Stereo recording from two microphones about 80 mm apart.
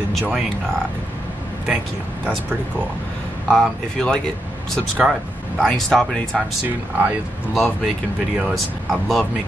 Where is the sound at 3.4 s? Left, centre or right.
Centre.